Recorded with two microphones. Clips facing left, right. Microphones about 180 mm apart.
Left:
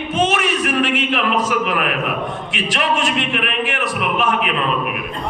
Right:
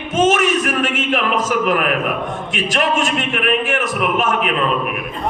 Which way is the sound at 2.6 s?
45° right (ahead or behind).